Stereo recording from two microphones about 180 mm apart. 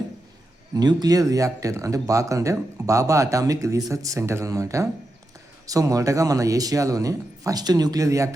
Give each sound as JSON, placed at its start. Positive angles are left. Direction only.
{"t": 0.7, "sound": "speech", "side_deg": -20}